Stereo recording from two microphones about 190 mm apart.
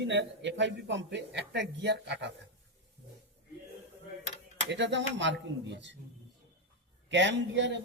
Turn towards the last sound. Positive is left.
turn(degrees=-70)  # may be behind; listen again after turning